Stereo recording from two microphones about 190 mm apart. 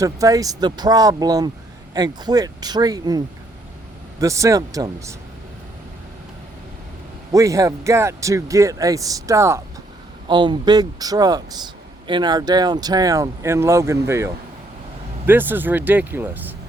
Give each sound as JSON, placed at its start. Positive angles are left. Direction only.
{"t": 0.0, "sound": "speech", "side_deg": -15}
{"t": 7.3, "sound": "speech", "side_deg": -15}
{"t": 15.3, "sound": "speech", "side_deg": -10}